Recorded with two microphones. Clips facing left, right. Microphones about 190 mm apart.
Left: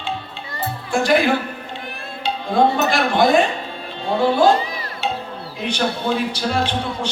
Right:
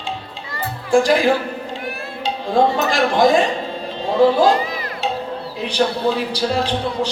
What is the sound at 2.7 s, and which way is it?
Speech, 35° right (ahead or behind).